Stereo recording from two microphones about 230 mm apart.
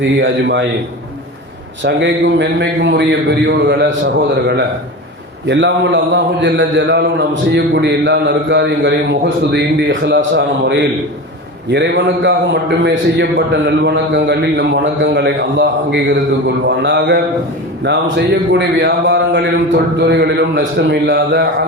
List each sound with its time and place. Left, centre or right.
0.0 s a man's voice: right
1.8 s a man's voice: right